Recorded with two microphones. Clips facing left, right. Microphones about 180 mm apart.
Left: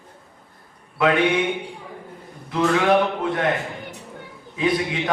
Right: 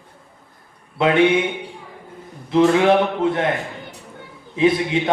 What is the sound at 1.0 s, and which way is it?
Speech, 25° right (ahead or behind).